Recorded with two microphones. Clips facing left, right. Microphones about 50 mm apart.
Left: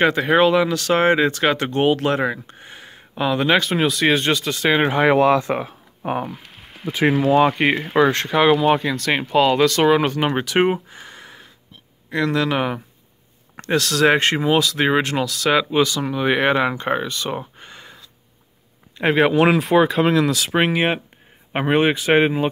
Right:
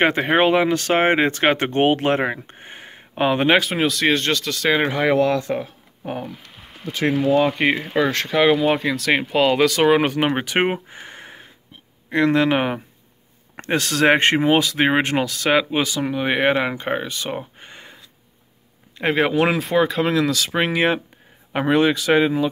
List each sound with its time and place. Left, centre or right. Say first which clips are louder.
0.0 s speech: left 1 dB; right
3.5 s speech: even; centre
3.8 s speech: left 1 dB; centre; by 5.6 s left
5.6 s a sound: left 2 dB; left
6.8 s speech: left 2 dB; centre
17.6 s a sound: left 1 dB; centre
18.9 s speech: left 2 dB; centre
21.5 s speech: even; left